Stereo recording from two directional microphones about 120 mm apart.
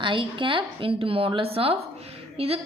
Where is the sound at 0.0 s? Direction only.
45° right (ahead or behind).